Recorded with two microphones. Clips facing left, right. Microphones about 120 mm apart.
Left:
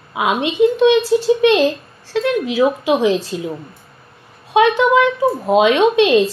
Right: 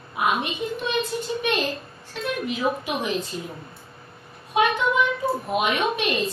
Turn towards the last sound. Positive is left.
turn(degrees=90)